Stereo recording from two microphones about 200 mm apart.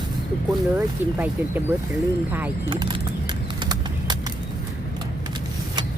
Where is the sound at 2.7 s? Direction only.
25° right (ahead or behind).